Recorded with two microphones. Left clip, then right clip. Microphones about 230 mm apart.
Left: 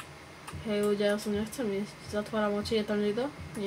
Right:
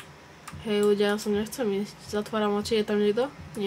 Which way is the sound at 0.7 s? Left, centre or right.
Right.